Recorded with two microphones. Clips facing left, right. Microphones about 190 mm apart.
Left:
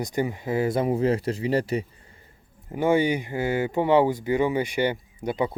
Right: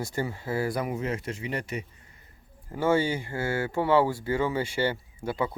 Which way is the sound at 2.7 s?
15° left (ahead or behind).